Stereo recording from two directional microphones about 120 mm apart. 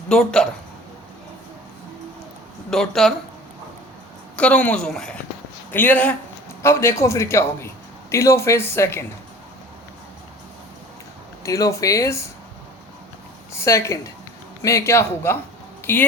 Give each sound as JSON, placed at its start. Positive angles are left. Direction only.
{"t": 0.1, "sound": "speech", "side_deg": 5}
{"t": 2.6, "sound": "speech", "side_deg": 5}
{"t": 4.4, "sound": "a woman's voice", "side_deg": 10}
{"t": 11.4, "sound": "a man's voice", "side_deg": 25}
{"t": 13.5, "sound": "a man's voice", "side_deg": 25}